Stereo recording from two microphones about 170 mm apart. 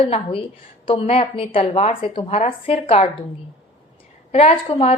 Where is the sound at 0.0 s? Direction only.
35° left (ahead or behind).